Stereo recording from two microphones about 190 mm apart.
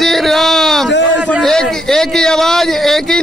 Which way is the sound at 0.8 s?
70° left (ahead or behind).